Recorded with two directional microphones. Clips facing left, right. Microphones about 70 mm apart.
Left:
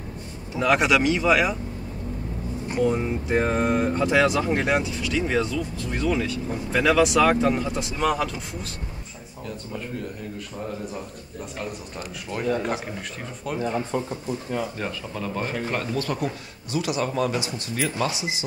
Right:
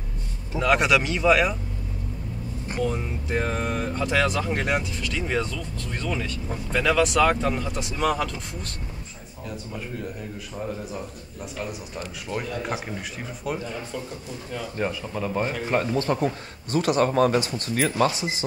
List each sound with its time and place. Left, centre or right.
0.6 s speech: centre
2.8 s speech: left
7.7 s speech: centre
11.9 s speech: centre
13.6 s speech: left
14.8 s speech: centre
15.9 s a man's voice: right
16.7 s speech: right